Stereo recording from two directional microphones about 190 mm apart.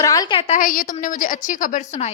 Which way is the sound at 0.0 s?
20° left (ahead or behind).